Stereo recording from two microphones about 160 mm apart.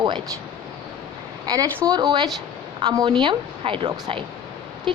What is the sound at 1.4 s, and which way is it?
A woman's voice, 20° right (ahead or behind).